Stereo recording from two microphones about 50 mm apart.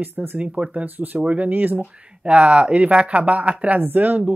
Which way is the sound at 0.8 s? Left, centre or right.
Right.